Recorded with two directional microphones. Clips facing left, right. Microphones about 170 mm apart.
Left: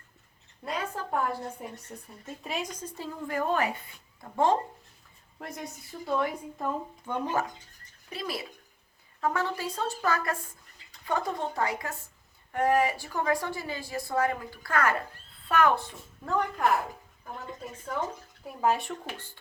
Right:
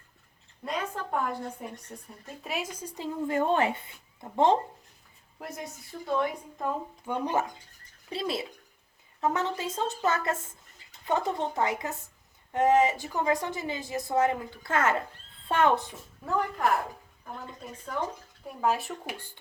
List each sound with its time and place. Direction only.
0.6 s a woman's voice: 5° left (ahead or behind); by 4.6 s 20° right (ahead or behind)
5.4 s a woman's voice: 5° right (ahead or behind)
7.0 s a woman's voice: 15° right (ahead or behind)
16.2 s speech: 5° right (ahead or behind)
18.4 s speech: centre (ahead or behind)
19.0 s speech: 15° right (ahead or behind)